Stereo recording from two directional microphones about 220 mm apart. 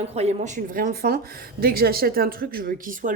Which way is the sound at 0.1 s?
30° right (ahead or behind).